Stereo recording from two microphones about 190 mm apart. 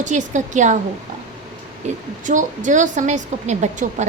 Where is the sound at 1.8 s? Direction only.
40° right (ahead or behind).